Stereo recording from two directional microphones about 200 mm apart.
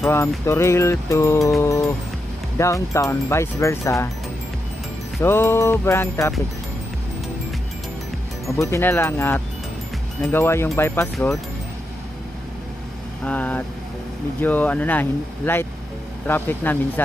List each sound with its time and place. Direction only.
0.0 s speech: 10° left (ahead or behind)
5.2 s speech: 10° left (ahead or behind)
8.5 s speech: 15° left (ahead or behind)
13.2 s speech: 10° left (ahead or behind)